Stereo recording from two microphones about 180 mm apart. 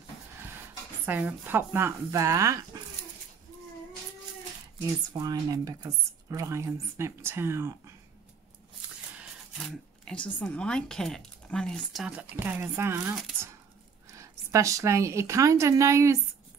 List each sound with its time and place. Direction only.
1.0 s speech: 10° right (ahead or behind)
5.1 s speech: 20° right (ahead or behind)
9.6 s speech: 5° left (ahead or behind); by 13.1 s 15° right (ahead or behind)
14.1 s speech: 15° right (ahead or behind)